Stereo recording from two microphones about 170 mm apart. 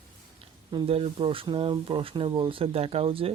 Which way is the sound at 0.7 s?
35° right (ahead or behind).